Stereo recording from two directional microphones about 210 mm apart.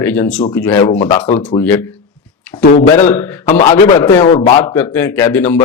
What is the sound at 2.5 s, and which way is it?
A man's voice, 20° left (ahead or behind).